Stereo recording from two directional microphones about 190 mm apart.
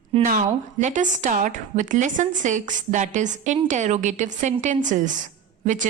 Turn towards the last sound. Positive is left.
turn(degrees=-40)  # may be behind; listen again after turning